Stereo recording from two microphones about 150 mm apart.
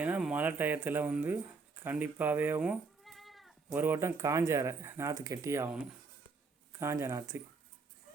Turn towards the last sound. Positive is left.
turn(degrees=-20)  # may be behind; listen again after turning